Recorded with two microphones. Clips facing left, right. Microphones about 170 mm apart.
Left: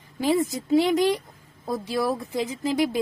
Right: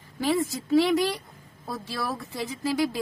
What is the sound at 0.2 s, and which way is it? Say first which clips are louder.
A woman's voice: left 3 dB; 20° left (ahead or behind).